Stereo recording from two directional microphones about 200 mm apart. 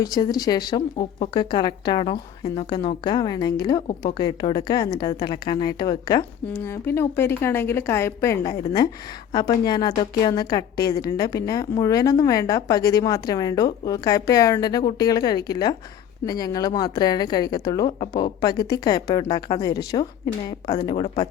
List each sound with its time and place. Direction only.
0.0 s a woman's voice: 20° left (ahead or behind)